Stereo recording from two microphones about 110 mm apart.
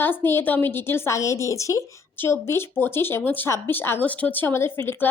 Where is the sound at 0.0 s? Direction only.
20° left (ahead or behind).